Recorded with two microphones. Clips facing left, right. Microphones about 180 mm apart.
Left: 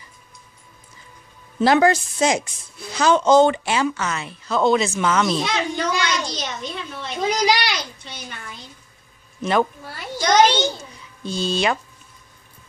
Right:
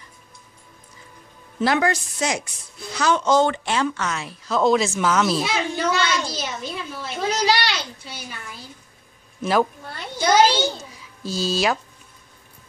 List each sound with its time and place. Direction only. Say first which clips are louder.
1.6 s a woman's voice: left 5 dB; 25° left (ahead or behind)
3.6 s speech: left 1 dB; 5° left (ahead or behind)
7.2 s a child's voice: left 1 dB; 15° left (ahead or behind)
8.0 s a child's voice: even; 5° right (ahead or behind)